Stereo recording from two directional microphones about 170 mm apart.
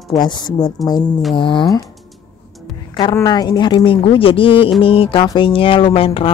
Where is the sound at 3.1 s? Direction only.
25° left (ahead or behind).